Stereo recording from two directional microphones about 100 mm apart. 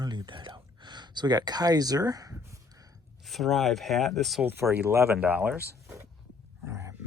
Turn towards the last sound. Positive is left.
turn(degrees=-30)  # may be behind; listen again after turning